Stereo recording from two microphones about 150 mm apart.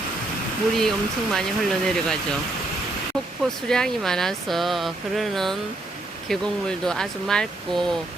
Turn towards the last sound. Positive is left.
turn(degrees=5)  # may be behind; listen again after turning